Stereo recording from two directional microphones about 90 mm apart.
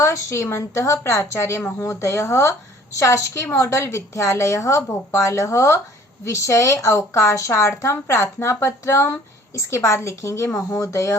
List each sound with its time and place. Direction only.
0.0 s a woman's voice: 35° left (ahead or behind)